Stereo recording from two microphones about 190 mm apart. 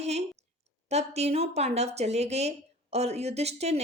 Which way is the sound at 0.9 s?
35° right (ahead or behind).